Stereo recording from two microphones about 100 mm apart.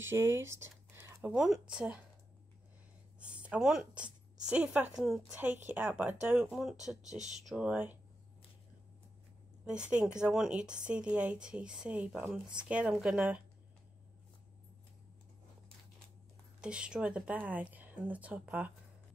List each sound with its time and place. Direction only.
0.0 s a sound: 25° right (ahead or behind)
1.3 s speech: 5° right (ahead or behind)
3.2 s a sound: 10° right (ahead or behind)
4.9 s a woman's voice: centre (ahead or behind)
5.3 s speech: 20° right (ahead or behind)
6.5 s speech: 5° right (ahead or behind)
9.7 s speech: 10° right (ahead or behind)
16.6 s speech: 10° right (ahead or behind)